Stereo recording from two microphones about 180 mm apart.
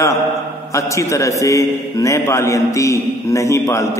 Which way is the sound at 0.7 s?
15° left (ahead or behind).